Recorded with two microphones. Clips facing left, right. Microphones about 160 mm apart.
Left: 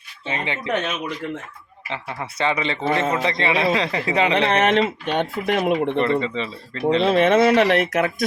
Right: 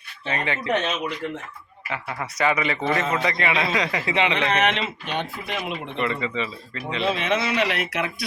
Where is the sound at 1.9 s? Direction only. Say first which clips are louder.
Left 1 dB; 25° left (ahead or behind).